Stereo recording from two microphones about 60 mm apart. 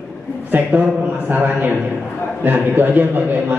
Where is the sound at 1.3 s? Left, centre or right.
Right.